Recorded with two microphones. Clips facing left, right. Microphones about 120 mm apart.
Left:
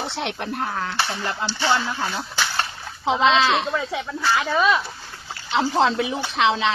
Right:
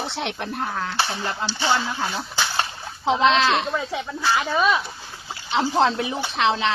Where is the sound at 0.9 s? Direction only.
25° right (ahead or behind).